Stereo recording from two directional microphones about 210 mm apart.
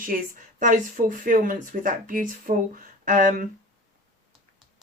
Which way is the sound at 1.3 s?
40° right (ahead or behind).